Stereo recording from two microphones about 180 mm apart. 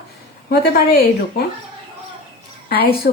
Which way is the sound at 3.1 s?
60° left (ahead or behind).